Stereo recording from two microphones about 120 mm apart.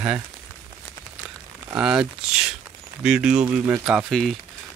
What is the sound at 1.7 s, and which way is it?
Speech, 5° right (ahead or behind).